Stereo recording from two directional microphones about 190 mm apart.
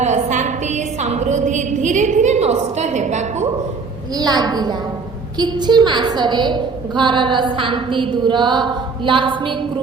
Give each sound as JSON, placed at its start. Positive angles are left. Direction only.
{"t": 0.0, "sound": "a woman's voice", "side_deg": -40}
{"t": 4.2, "sound": "a woman's voice", "side_deg": -20}